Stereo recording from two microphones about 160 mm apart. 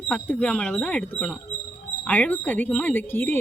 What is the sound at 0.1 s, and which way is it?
Speech, 5° left (ahead or behind).